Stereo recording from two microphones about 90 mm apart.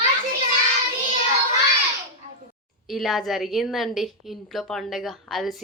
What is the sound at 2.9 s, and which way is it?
A woman's voice, centre (ahead or behind).